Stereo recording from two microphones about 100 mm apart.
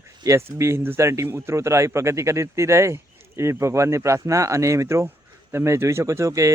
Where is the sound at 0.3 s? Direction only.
30° right (ahead or behind).